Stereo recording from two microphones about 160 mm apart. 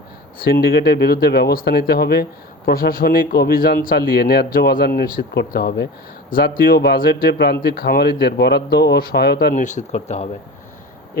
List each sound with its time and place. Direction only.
0.3 s speech: 75° left (ahead or behind)
4.5 s a man's voice: 65° left (ahead or behind); by 9.6 s 85° left
9.6 s speech: 50° left (ahead or behind)